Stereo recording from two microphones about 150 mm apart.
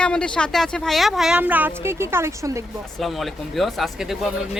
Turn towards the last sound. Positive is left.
turn(degrees=0)  # may be behind; listen again after turning